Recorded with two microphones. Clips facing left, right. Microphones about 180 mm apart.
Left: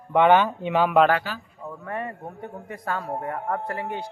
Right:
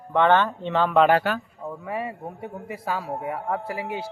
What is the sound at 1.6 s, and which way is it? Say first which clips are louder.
A man's voice: right 2 dB; 10° right (ahead or behind).